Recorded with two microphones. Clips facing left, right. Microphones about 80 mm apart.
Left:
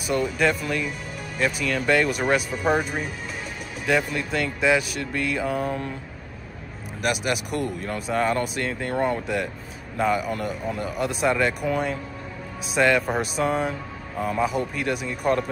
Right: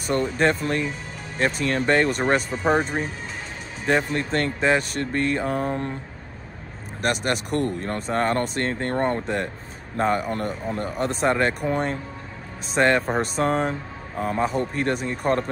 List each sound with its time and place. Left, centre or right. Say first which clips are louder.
0.0 s speech: right 1 dB; right
7.0 s speech: right 1 dB; right
9.9 s speech: right 1 dB; right